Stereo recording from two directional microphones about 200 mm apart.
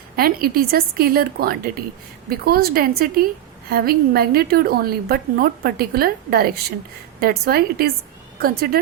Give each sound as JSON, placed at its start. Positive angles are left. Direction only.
{"t": 0.2, "sound": "a woman's voice", "side_deg": -50}